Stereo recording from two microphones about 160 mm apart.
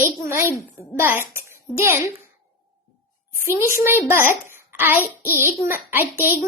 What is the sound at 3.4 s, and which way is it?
A child's voice, 15° right (ahead or behind).